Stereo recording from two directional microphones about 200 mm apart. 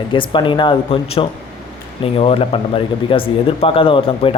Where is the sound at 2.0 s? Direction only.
30° left (ahead or behind).